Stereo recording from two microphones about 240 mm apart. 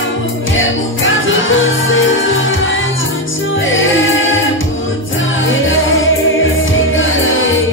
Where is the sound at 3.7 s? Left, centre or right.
Left.